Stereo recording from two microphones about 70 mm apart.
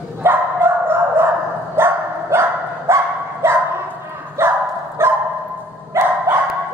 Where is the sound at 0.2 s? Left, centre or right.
Right.